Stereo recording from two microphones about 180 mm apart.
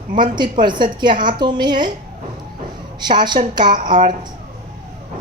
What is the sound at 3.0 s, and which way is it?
Speech, 25° right (ahead or behind).